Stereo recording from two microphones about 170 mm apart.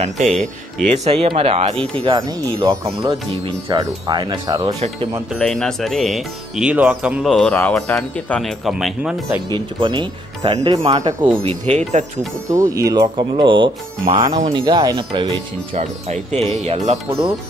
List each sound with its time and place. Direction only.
0.0 s speech: 45° right (ahead or behind); by 4.7 s 25° right (ahead or behind)
5.3 s speech: 5° left (ahead or behind)
7.3 s speech: 10° left (ahead or behind)
9.8 s speech: 30° right (ahead or behind)
11.0 s speech: 25° right (ahead or behind)
11.4 s speech: 40° right (ahead or behind)
12.4 s speech: 20° right (ahead or behind)
15.7 s speech: 40° right (ahead or behind)